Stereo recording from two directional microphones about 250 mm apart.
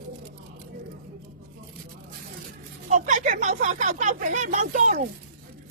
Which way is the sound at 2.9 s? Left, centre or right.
Right.